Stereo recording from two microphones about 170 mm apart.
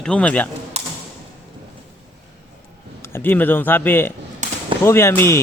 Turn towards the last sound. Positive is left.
turn(degrees=15)  # may be behind; listen again after turning